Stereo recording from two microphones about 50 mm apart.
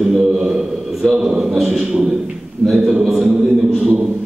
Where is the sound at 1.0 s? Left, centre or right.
Centre.